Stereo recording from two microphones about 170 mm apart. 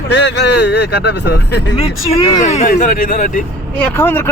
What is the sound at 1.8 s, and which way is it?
Speech, 40° left (ahead or behind).